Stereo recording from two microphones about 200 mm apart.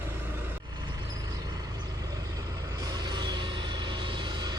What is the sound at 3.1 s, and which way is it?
Music, 20° right (ahead or behind).